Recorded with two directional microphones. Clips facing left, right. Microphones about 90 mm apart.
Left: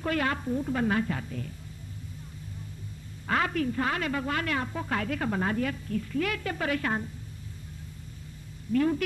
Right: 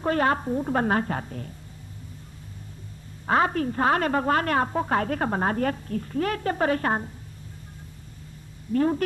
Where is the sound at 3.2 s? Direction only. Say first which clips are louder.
Right 5 dB; 35° right (ahead or behind).